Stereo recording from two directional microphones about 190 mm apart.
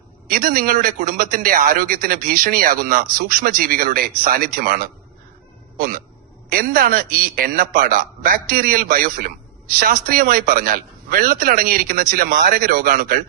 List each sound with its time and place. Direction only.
0.3 s a man's voice: 50° right (ahead or behind)